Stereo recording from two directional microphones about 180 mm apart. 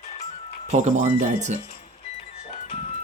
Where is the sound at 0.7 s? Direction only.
40° right (ahead or behind).